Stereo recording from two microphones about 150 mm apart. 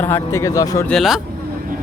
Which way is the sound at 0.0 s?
15° left (ahead or behind).